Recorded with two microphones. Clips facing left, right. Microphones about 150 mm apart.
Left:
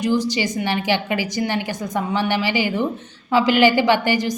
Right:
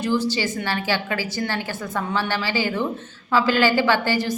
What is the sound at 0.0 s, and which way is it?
A woman's voice, 15° left (ahead or behind).